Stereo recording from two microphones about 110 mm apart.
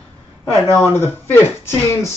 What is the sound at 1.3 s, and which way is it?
Speech, 25° left (ahead or behind).